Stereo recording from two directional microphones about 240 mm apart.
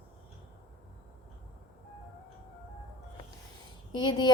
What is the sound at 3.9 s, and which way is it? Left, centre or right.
Speech, centre.